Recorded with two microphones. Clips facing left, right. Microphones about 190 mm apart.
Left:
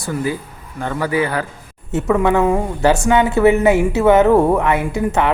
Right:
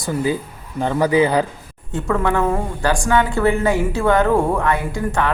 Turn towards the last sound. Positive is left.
turn(degrees=20)  # may be behind; listen again after turning